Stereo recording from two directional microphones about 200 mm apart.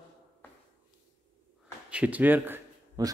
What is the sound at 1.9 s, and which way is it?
Speech, 5° right (ahead or behind).